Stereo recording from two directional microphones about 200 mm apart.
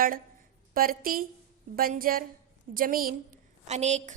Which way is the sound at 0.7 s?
45° right (ahead or behind).